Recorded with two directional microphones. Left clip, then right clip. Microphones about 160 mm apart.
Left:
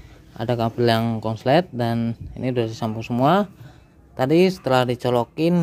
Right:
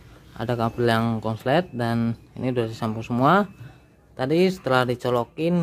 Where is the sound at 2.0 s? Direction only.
5° right (ahead or behind).